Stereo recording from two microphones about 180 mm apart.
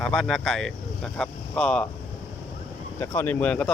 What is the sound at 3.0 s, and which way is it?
Speech, 10° left (ahead or behind).